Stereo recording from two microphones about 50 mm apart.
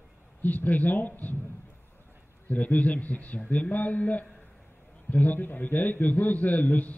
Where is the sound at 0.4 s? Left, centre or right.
Left.